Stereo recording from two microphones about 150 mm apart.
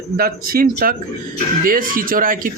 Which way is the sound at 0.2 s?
80° right.